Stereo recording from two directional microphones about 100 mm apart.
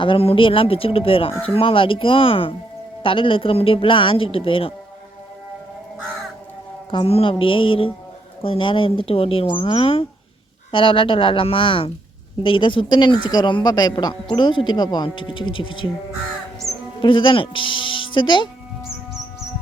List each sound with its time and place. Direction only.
0.0 s speech: 70° left (ahead or behind)
6.9 s speech: 70° left (ahead or behind)
16.6 s bird: 35° left (ahead or behind)
17.0 s speech: 55° left (ahead or behind)